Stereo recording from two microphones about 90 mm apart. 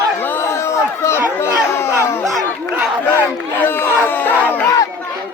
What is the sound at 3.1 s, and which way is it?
Crowd, 25° left (ahead or behind).